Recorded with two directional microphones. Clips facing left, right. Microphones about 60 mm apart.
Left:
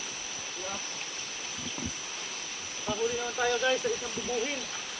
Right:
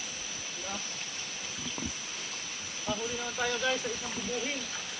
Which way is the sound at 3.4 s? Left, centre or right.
Centre.